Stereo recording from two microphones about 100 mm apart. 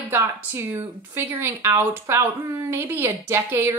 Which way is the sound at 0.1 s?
20° right (ahead or behind).